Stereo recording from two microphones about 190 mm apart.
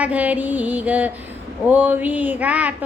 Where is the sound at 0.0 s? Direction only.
5° right (ahead or behind).